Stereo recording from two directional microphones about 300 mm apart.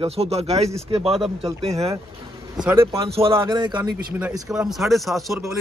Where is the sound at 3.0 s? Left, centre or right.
Centre.